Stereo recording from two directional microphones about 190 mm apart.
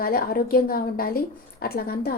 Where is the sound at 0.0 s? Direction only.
50° left (ahead or behind).